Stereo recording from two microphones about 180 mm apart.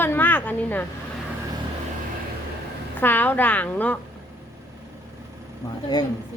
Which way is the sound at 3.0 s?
10° left (ahead or behind).